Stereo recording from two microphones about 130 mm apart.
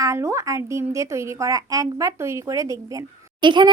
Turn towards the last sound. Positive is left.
turn(degrees=-35)  # may be behind; listen again after turning